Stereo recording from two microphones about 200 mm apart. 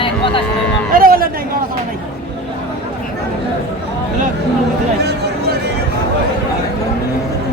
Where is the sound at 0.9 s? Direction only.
45° right (ahead or behind).